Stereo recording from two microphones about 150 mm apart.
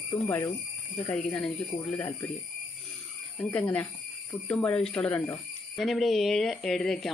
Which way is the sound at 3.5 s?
10° left (ahead or behind).